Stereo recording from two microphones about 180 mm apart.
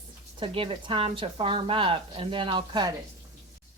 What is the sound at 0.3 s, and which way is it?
Speech, 30° right (ahead or behind).